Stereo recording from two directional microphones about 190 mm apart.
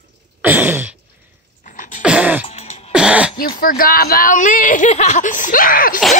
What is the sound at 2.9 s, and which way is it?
Cough, 5° right (ahead or behind).